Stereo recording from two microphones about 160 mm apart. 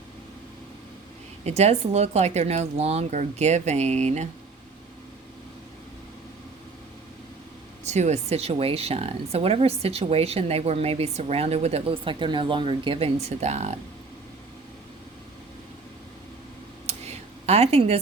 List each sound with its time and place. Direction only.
1.5 s speech: 40° right (ahead or behind)
7.9 s speech: 45° right (ahead or behind)
16.8 s a sound: 40° right (ahead or behind)